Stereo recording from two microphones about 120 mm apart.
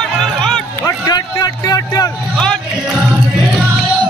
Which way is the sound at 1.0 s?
35° left (ahead or behind).